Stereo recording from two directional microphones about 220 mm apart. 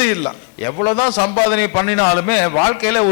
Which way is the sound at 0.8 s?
25° left (ahead or behind).